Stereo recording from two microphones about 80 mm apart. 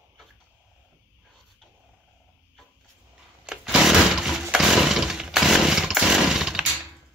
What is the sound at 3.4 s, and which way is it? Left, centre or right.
Chainsaw, centre.